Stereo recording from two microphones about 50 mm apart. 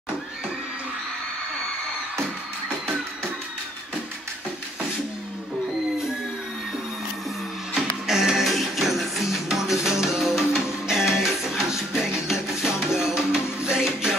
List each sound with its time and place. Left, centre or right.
7.7 s music: centre